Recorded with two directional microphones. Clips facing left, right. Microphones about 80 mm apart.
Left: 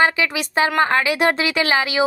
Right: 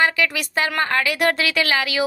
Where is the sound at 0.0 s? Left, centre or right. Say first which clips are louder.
Left 2 dB; left.